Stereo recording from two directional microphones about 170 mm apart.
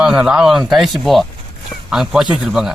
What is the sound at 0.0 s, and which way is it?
Speech, 5° right (ahead or behind).